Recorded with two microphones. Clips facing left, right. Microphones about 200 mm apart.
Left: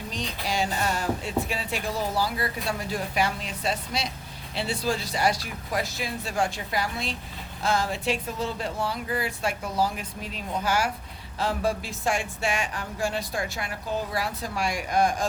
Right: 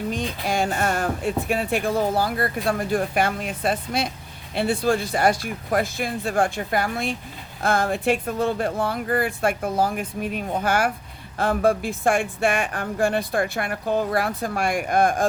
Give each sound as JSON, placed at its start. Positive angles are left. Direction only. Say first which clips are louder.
{"t": 0.1, "sound": "speech", "louder": "right 5 dB", "side_deg": -55}